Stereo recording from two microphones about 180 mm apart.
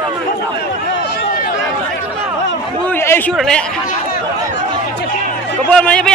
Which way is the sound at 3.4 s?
5° left (ahead or behind).